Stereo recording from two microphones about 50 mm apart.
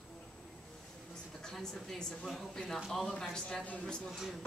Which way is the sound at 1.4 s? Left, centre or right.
Centre.